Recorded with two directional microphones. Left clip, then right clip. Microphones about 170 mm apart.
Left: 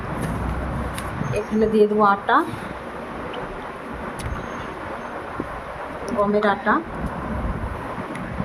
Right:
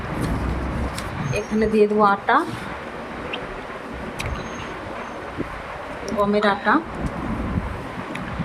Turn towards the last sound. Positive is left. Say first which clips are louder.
# right 1 dB
turn(degrees=-40)  # may be behind; listen again after turning